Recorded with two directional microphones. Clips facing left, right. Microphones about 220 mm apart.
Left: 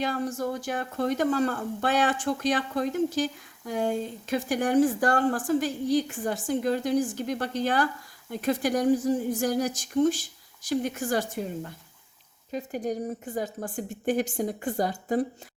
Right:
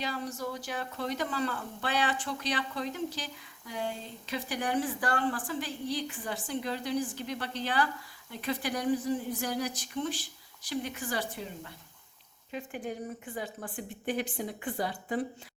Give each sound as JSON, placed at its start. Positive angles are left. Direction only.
{"t": 0.0, "sound": "speech", "side_deg": 50}